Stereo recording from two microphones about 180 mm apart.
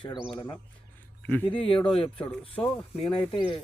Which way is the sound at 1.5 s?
30° left (ahead or behind).